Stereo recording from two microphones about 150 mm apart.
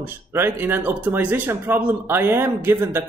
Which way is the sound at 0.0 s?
15° right (ahead or behind).